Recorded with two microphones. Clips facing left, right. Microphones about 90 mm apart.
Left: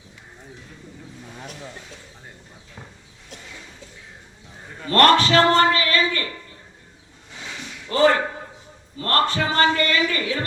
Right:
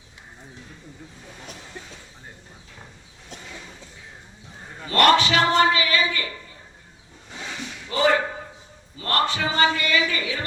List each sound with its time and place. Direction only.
4.8 s a man's voice: 15° right (ahead or behind)
7.9 s a sound: 15° right (ahead or behind)
9.0 s a man's voice: 15° right (ahead or behind)